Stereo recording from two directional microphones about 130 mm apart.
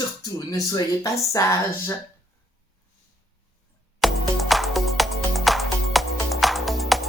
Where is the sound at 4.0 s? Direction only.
Centre (ahead or behind).